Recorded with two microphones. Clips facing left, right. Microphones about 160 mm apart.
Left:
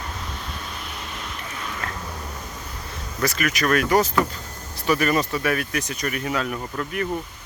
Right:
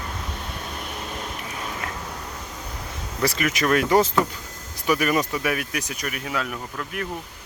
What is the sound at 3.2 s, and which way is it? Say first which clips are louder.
Speech: even; 25° right (ahead or behind).